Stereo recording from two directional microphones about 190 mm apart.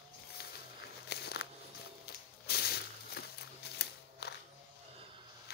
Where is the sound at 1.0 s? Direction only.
60° left (ahead or behind).